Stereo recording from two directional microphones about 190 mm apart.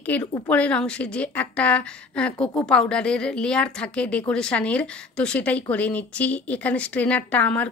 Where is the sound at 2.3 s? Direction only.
15° left (ahead or behind).